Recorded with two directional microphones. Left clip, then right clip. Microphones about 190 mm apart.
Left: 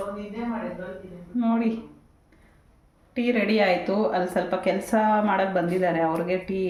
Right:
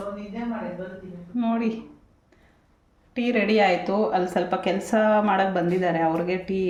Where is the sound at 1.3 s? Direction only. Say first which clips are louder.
Even; 15° right (ahead or behind).